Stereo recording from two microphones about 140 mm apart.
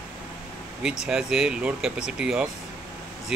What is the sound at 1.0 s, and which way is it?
Speech, 5° right (ahead or behind).